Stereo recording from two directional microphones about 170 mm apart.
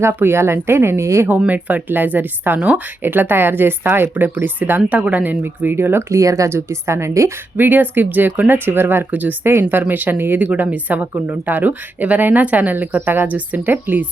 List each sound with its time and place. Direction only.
0.0 s speech: 15° right (ahead or behind)